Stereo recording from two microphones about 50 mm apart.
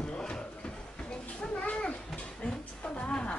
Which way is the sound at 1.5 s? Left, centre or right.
Left.